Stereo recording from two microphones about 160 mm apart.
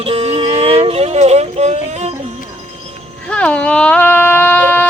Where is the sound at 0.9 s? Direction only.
40° right (ahead or behind).